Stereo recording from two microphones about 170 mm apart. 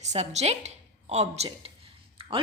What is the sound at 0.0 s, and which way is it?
A woman's voice, 40° right (ahead or behind).